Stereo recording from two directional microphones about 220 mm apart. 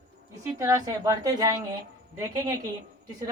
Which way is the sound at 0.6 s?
15° right (ahead or behind).